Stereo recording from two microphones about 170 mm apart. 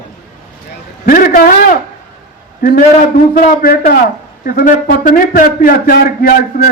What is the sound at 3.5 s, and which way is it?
A man's voice, 60° left (ahead or behind).